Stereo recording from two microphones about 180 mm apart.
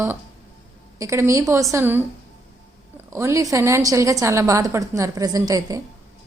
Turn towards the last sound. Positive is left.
turn(degrees=-20)  # may be behind; listen again after turning